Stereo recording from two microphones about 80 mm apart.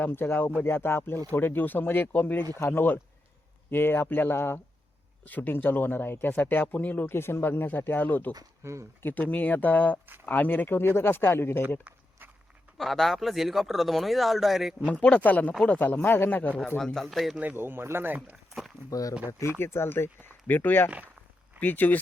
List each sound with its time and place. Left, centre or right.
0.0 s speech: left
8.6 s speech: right
9.0 s speech: left
12.7 s speech: centre
14.8 s speech: centre
16.7 s speech: centre
17.6 s speech: right
18.9 s speech: left
19.3 s speech: left